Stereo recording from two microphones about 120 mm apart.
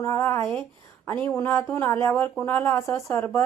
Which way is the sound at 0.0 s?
25° left (ahead or behind).